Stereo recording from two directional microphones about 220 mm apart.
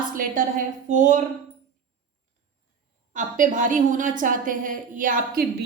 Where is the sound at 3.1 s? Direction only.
35° right (ahead or behind).